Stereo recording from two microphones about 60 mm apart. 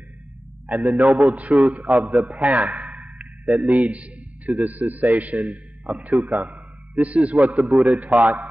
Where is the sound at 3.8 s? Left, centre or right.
Right.